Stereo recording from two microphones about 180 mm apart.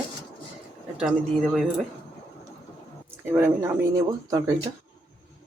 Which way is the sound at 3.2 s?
10° right (ahead or behind).